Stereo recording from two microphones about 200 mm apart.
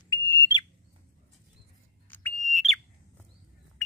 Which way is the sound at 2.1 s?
5° left (ahead or behind).